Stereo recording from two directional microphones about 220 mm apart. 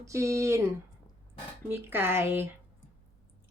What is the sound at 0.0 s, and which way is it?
Speech, 15° right (ahead or behind).